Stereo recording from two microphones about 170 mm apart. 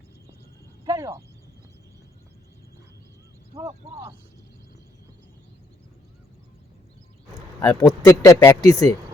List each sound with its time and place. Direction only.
0.9 s a sound: 20° right (ahead or behind)
3.5 s speech: 40° right (ahead or behind)
7.6 s speech: 20° left (ahead or behind)